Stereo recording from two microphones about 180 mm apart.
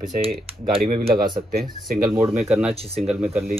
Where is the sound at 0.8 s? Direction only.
55° right (ahead or behind).